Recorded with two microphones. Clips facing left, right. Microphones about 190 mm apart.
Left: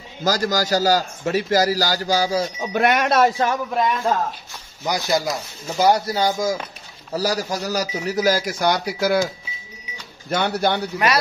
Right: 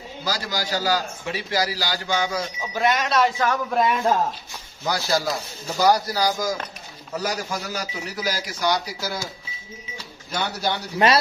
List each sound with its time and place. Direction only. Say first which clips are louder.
0.2 s a man's voice: left 8 dB; 45° left (ahead or behind)
2.7 s speech: left 3 dB; 60° left (ahead or behind)
3.7 s a man's voice: even; centre (ahead or behind)
4.8 s speech: left 2 dB; 15° left (ahead or behind)
7.2 s a man's voice: left 5 dB; 35° left (ahead or behind); by 9.2 s 55° left (ahead or behind)
10.3 s speech: left 6 dB; 55° left (ahead or behind)
11.0 s speech: right 3 dB; 25° right (ahead or behind)